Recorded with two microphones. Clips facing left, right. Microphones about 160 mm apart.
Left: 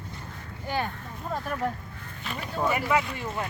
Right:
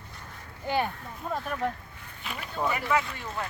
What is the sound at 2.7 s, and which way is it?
Speech, 10° left (ahead or behind).